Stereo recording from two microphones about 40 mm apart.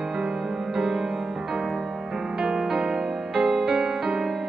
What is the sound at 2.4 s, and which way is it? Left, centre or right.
Music, centre.